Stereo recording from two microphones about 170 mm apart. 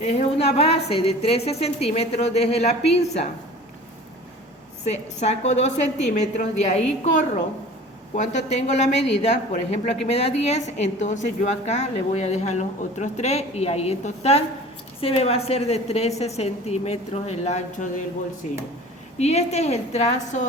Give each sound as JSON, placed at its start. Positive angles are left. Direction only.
{"t": 0.0, "sound": "speech", "side_deg": 40}
{"t": 4.9, "sound": "a woman's voice", "side_deg": 40}
{"t": 19.2, "sound": "speech", "side_deg": 40}